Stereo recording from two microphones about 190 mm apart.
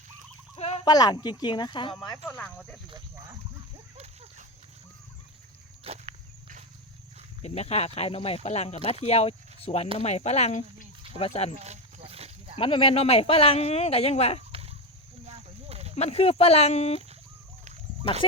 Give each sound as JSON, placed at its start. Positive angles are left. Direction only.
{"t": 0.5, "sound": "speech", "side_deg": 30}
{"t": 2.2, "sound": "speech", "side_deg": 5}
{"t": 3.9, "sound": "a sound", "side_deg": -35}
{"t": 5.8, "sound": "walk", "side_deg": -35}
{"t": 7.4, "sound": "speech", "side_deg": 35}
{"t": 11.5, "sound": "snake", "side_deg": -35}
{"t": 12.5, "sound": "speech", "side_deg": 30}
{"t": 14.5, "sound": "a sound", "side_deg": -30}
{"t": 16.0, "sound": "speech", "side_deg": 35}